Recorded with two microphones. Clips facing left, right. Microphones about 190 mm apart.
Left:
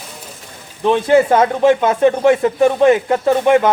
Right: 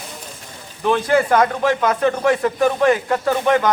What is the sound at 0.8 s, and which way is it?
Speech, 25° left (ahead or behind).